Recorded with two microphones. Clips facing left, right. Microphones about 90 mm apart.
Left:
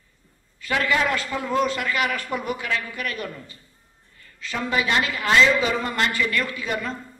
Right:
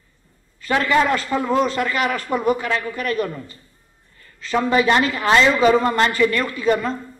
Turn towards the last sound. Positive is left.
turn(degrees=-35)  # may be behind; listen again after turning